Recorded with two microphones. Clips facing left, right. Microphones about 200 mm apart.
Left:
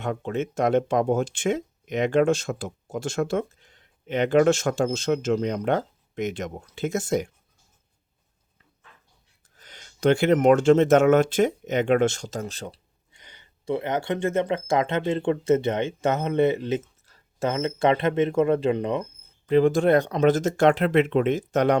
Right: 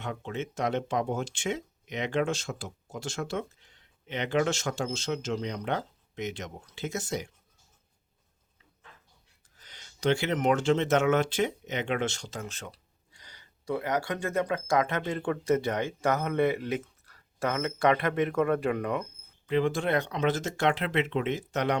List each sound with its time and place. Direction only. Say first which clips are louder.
0.0 s speech: left 7 dB; 50° left (ahead or behind)
9.6 s speech: left 8 dB; 50° left (ahead or behind); by 12.8 s 35° left (ahead or behind)
13.1 s speech: left 3 dB; 20° left (ahead or behind)
19.5 s speech: left 8 dB; 40° left (ahead or behind)